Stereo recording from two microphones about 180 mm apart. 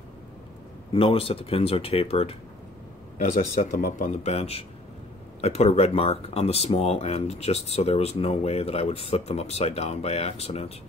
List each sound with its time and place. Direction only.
0.9 s speech: 30° left (ahead or behind)
3.3 s speech: 50° left (ahead or behind)